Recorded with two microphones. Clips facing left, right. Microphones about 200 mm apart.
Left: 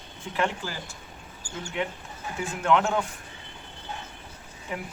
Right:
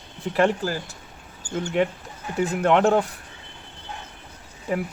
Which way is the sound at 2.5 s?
40° right (ahead or behind).